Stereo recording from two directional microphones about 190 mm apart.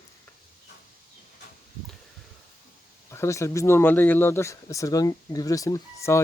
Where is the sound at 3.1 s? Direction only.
15° left (ahead or behind).